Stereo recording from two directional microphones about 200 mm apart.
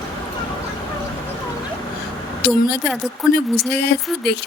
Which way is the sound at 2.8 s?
Centre (ahead or behind).